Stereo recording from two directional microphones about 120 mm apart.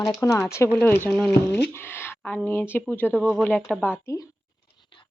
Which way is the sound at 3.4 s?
10° left (ahead or behind).